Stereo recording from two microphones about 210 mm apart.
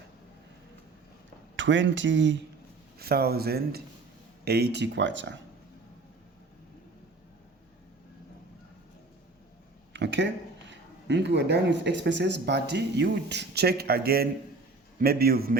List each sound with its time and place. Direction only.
1.5 s speech: 60° right (ahead or behind)
3.0 s speech: 45° right (ahead or behind)
9.9 s a sound: 60° right (ahead or behind)
10.7 s speech: 55° right (ahead or behind)